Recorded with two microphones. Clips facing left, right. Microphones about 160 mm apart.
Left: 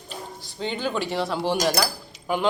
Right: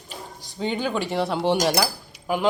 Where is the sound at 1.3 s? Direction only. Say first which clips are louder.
Right 3 dB; 20° right (ahead or behind).